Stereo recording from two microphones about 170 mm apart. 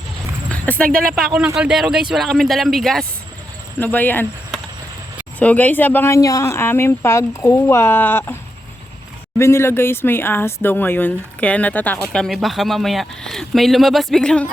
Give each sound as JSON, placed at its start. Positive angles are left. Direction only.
{"t": 0.5, "sound": "a sound", "side_deg": 10}
{"t": 0.9, "sound": "speech", "side_deg": -55}
{"t": 1.5, "sound": "speech", "side_deg": -5}
{"t": 5.4, "sound": "speech", "side_deg": 10}
{"t": 9.4, "sound": "speech", "side_deg": 15}